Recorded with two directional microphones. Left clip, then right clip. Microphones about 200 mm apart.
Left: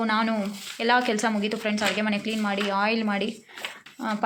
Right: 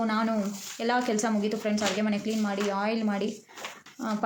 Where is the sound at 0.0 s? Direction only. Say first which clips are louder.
Left 3 dB; 5° right (ahead or behind).